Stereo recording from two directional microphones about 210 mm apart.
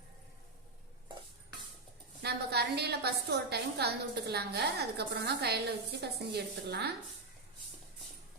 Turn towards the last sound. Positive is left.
turn(degrees=-50)  # may be behind; listen again after turning